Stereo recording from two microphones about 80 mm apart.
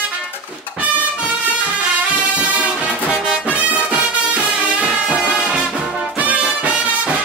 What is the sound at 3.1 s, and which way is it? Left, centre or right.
Music, centre.